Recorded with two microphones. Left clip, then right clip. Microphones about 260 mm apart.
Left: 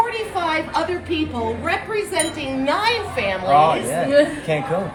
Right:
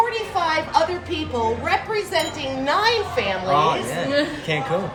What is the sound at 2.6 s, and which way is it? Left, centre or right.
A woman's voice, centre.